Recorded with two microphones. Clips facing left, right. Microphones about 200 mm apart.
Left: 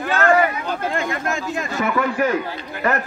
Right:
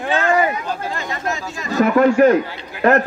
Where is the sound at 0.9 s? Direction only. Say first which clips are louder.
Left 2 dB; 50° left (ahead or behind).